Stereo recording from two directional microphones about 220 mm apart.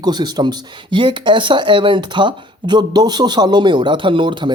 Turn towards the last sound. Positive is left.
turn(degrees=-20)  # may be behind; listen again after turning